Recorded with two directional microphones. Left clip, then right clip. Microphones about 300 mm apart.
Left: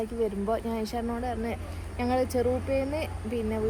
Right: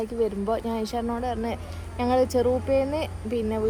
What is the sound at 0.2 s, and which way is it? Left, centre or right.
Speech, centre.